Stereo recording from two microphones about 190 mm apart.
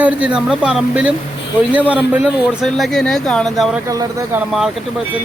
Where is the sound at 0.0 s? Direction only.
5° right (ahead or behind).